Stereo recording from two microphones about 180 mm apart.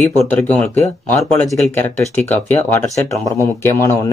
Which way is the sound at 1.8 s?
10° left (ahead or behind).